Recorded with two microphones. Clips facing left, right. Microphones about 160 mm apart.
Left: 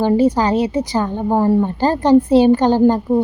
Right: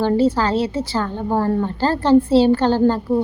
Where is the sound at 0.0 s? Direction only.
15° left (ahead or behind).